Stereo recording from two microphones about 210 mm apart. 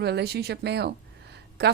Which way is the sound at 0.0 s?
50° right (ahead or behind).